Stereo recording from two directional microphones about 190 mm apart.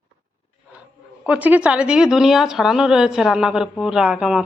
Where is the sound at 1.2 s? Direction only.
5° right (ahead or behind).